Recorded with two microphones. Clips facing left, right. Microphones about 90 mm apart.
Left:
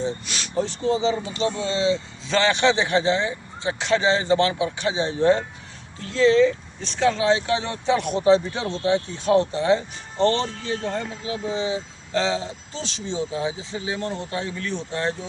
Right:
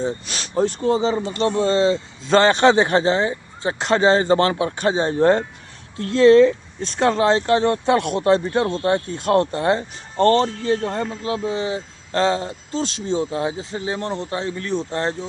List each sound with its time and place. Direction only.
0.0 s speech: 40° right (ahead or behind)